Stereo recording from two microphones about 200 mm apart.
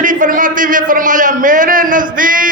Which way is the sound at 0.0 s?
40° right (ahead or behind).